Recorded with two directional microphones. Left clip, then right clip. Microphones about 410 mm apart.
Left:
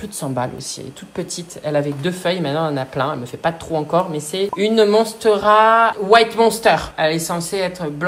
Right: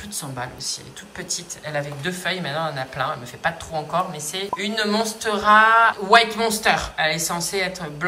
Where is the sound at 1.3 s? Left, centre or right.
Centre.